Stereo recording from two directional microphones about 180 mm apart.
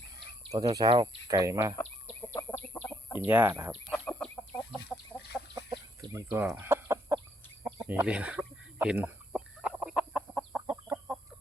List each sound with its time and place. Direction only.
0.5 s speech: 20° right (ahead or behind)
0.9 s speech: 30° right (ahead or behind)
1.3 s speech: 15° right (ahead or behind)
2.7 s chicken: 10° left (ahead or behind)
3.2 s speech: 10° right (ahead or behind)
3.9 s chicken: 5° left (ahead or behind)
4.9 s chicken: 10° right (ahead or behind)
5.7 s bird: 20° right (ahead or behind)
6.6 s chicken: 15° right (ahead or behind)